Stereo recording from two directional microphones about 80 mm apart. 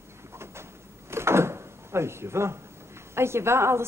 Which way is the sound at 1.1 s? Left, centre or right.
Right.